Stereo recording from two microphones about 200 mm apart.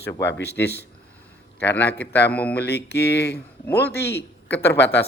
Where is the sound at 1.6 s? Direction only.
10° left (ahead or behind).